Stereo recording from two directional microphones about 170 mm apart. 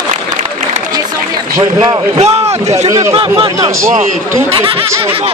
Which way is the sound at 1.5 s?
20° right (ahead or behind).